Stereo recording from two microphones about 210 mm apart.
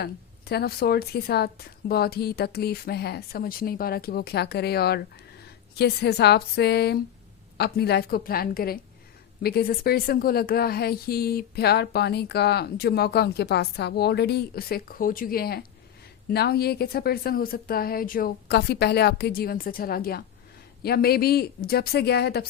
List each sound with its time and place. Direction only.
0.0 s a woman's voice: 50° left (ahead or behind)